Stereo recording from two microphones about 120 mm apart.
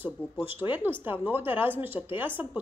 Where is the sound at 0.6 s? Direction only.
15° right (ahead or behind).